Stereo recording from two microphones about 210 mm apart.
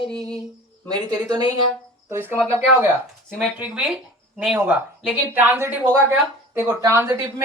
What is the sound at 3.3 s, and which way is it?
Speech, centre (ahead or behind).